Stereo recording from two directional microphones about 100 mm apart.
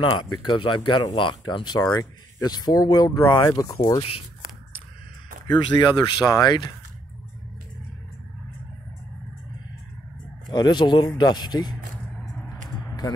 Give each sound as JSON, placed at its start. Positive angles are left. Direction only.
{"t": 0.0, "sound": "speech", "side_deg": 50}
{"t": 5.5, "sound": "speech", "side_deg": 45}
{"t": 10.5, "sound": "speech", "side_deg": 45}
{"t": 13.0, "sound": "speech", "side_deg": 45}